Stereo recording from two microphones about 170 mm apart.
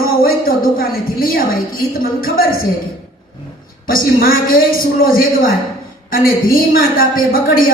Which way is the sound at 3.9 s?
55° left (ahead or behind).